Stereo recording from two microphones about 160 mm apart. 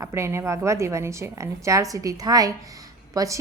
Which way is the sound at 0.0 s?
15° right (ahead or behind).